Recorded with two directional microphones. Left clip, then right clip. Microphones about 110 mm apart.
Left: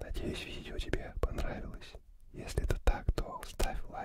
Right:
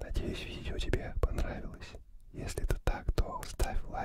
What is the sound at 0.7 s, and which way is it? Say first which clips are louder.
Speech: right 3 dB; 10° right (ahead or behind).